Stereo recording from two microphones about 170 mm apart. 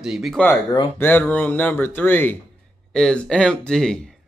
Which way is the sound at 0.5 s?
15° left (ahead or behind).